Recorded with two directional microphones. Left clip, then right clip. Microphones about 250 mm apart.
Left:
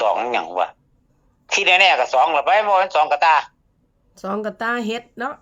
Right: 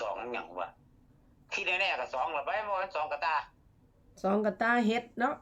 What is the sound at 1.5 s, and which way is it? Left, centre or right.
Speech, left.